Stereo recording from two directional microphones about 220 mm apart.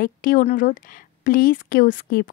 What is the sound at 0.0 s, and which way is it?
Speech, 40° left (ahead or behind).